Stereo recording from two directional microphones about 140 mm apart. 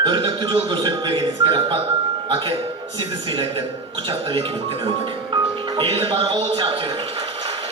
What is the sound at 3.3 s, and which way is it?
Music, 40° right (ahead or behind).